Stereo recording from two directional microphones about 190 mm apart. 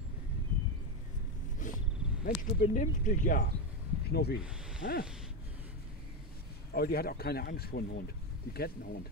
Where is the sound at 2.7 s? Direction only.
45° left (ahead or behind).